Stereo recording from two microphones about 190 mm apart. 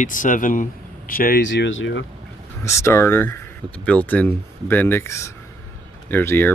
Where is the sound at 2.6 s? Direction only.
15° left (ahead or behind).